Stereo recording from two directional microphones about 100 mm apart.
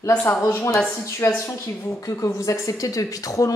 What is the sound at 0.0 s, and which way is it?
Speech, 20° left (ahead or behind).